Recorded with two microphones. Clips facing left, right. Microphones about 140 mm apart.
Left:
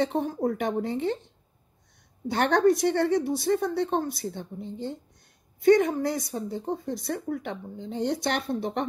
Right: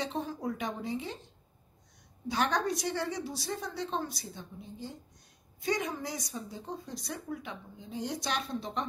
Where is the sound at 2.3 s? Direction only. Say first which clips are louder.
Left 9 dB; 60° left (ahead or behind).